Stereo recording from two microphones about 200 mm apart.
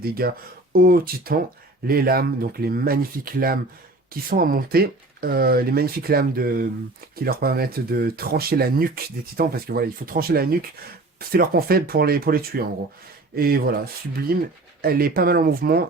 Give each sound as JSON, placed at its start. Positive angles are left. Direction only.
{"t": 0.0, "sound": "speech", "side_deg": -50}